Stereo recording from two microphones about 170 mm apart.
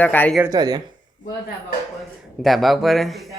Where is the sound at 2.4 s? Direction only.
Centre (ahead or behind).